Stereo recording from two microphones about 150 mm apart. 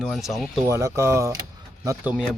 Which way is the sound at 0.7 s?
20° right (ahead or behind).